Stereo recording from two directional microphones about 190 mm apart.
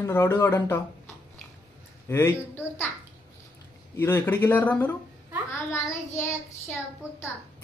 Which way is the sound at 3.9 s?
10° left (ahead or behind).